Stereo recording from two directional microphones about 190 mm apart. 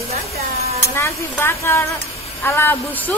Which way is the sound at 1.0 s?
15° left (ahead or behind).